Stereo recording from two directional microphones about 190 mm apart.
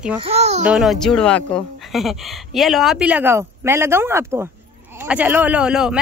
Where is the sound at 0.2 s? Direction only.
35° right (ahead or behind).